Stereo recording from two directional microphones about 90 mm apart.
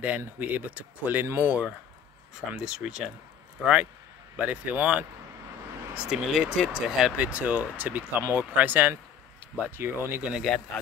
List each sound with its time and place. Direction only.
0.4 s speech: 20° right (ahead or behind)
1.2 s speech: 30° right (ahead or behind)
1.5 s speech: 15° right (ahead or behind)
4.4 s speech: 15° right (ahead or behind)
6.0 s speech: 5° right (ahead or behind)
8.2 s speech: 30° right (ahead or behind)
10.3 s a man's voice: centre (ahead or behind)